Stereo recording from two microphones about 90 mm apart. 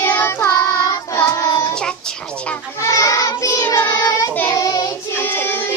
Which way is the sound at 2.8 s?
35° left (ahead or behind).